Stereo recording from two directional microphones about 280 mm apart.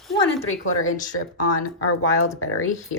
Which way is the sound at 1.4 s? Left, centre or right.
Left.